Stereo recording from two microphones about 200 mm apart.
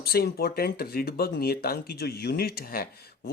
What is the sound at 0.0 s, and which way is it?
Speech, 50° left (ahead or behind).